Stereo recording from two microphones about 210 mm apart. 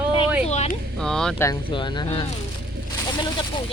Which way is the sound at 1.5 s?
20° left (ahead or behind).